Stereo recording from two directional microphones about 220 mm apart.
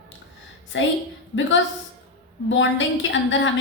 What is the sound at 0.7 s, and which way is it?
A woman's voice, 55° left (ahead or behind).